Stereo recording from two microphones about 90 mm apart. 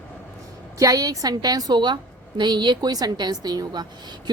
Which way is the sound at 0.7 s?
40° right (ahead or behind).